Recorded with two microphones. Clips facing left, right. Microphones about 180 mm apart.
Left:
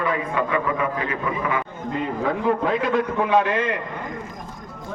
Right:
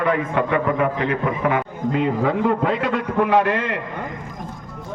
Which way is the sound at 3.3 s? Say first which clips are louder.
Even; 65° right (ahead or behind).